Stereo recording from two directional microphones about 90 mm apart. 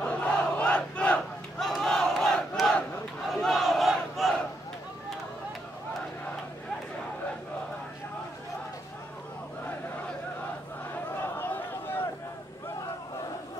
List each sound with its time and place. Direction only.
0.0 s battle cry: 15° left (ahead or behind)
1.7 s crowd: 5° left (ahead or behind)
3.3 s battle cry: centre (ahead or behind)
11.3 s a sound: 20° left (ahead or behind)